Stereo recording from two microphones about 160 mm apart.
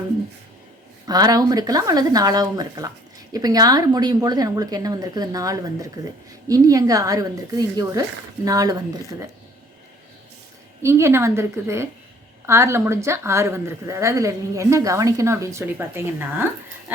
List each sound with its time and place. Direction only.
1.0 s a woman's voice: 25° right (ahead or behind)
10.8 s speech: 15° right (ahead or behind)